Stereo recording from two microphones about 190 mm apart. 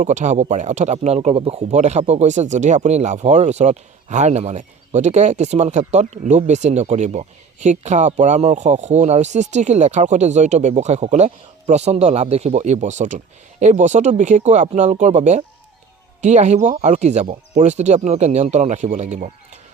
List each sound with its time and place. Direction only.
0.0 s speech: 40° right (ahead or behind)